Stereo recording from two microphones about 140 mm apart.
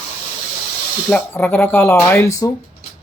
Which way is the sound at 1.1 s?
10° left (ahead or behind).